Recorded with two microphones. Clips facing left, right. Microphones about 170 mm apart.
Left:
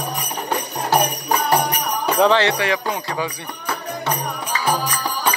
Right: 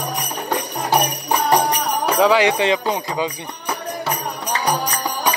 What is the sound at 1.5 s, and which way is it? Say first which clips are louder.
Music: right 3 dB; 35° right (ahead or behind).